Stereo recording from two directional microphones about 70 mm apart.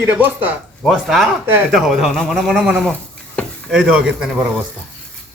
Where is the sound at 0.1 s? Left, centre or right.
Right.